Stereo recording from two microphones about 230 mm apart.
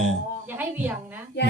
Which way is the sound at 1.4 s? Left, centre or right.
Left.